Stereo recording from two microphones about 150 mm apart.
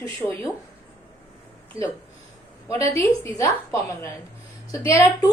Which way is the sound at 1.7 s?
20° left (ahead or behind).